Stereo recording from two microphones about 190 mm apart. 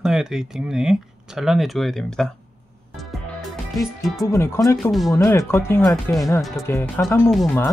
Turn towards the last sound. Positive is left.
turn(degrees=5)  # may be behind; listen again after turning